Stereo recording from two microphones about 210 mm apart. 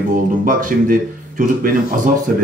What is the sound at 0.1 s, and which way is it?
Speech, 40° right (ahead or behind).